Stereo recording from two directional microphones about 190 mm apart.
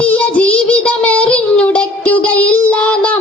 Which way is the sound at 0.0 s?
5° left (ahead or behind).